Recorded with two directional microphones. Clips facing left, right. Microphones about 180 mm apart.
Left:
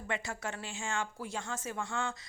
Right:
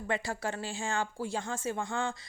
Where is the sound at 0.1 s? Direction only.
35° right (ahead or behind).